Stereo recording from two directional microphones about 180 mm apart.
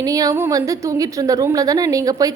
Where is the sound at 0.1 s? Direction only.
20° right (ahead or behind).